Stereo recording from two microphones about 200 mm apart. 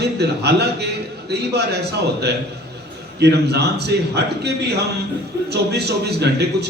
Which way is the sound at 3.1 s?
55° right (ahead or behind).